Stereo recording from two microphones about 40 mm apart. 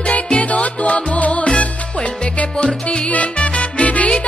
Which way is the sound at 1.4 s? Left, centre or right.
Left.